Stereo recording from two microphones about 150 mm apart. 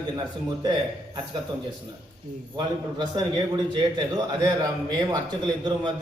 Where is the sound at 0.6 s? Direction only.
30° right (ahead or behind).